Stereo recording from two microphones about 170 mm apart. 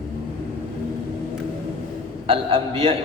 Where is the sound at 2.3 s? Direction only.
35° right (ahead or behind).